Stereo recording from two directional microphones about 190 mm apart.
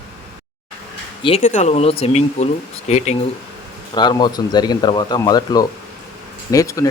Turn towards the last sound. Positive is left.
turn(degrees=15)  # may be behind; listen again after turning